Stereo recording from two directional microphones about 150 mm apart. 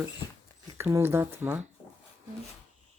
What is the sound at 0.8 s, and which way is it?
Speech, 15° right (ahead or behind).